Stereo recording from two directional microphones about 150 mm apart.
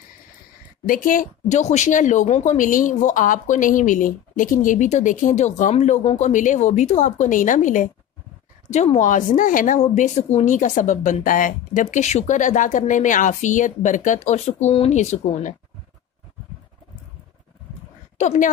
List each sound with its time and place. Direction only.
0.8 s a woman's voice: 65° left (ahead or behind)
18.1 s a woman's voice: 50° left (ahead or behind)